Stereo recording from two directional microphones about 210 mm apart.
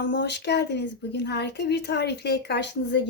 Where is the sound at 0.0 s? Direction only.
55° left (ahead or behind).